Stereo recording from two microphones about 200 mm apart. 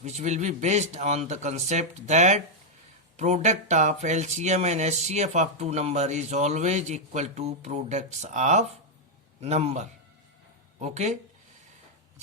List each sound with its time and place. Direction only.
0.0 s speech: 35° right (ahead or behind)